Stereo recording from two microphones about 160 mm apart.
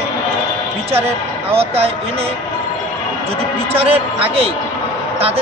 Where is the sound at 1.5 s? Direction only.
40° right (ahead or behind).